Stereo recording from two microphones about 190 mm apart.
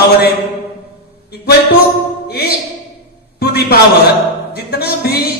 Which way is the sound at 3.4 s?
60° left (ahead or behind).